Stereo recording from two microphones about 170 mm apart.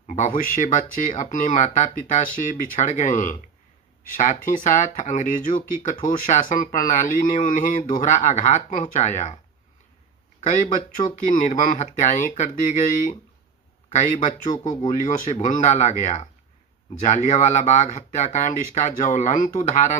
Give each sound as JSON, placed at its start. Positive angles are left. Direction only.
{"t": 0.1, "sound": "speech", "side_deg": 50}
{"t": 10.4, "sound": "speech", "side_deg": 45}
{"t": 13.9, "sound": "speech", "side_deg": 45}